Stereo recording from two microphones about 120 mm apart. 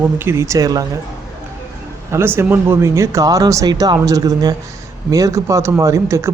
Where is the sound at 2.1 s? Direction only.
20° right (ahead or behind).